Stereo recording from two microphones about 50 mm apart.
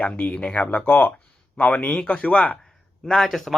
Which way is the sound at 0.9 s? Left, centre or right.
Left.